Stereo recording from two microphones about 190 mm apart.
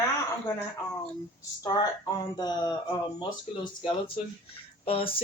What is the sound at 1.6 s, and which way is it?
Speech, 20° left (ahead or behind).